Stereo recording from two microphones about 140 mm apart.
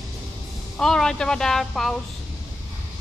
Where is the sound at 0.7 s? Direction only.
5° left (ahead or behind).